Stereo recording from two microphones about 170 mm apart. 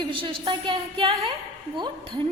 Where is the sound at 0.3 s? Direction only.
30° right (ahead or behind).